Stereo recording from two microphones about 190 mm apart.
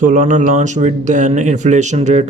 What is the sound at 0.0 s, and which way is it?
Speech, 40° right (ahead or behind).